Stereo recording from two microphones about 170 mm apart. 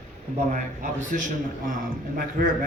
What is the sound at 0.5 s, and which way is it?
A man's voice, 50° right (ahead or behind).